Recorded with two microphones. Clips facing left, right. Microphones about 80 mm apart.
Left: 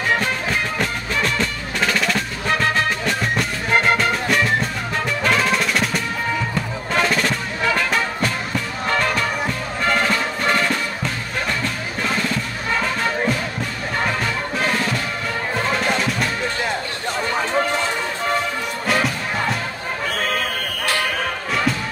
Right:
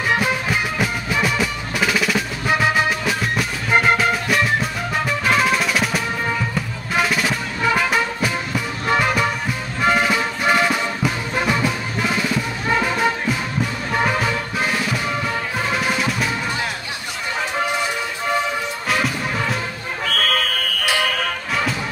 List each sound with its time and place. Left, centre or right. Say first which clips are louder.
0.1 s music: right 2 dB; centre
18.9 s music: left 1 dB; centre
20.1 s music: right 3 dB; centre